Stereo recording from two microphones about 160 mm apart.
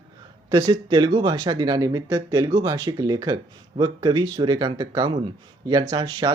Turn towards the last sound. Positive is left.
turn(degrees=-25)  # may be behind; listen again after turning